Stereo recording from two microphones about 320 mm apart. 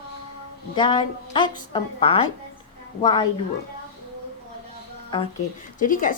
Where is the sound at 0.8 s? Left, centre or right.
Centre.